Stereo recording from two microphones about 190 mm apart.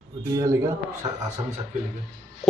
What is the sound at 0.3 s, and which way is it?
Speech, 15° right (ahead or behind).